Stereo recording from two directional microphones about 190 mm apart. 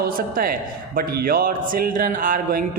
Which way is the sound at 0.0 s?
50° right (ahead or behind).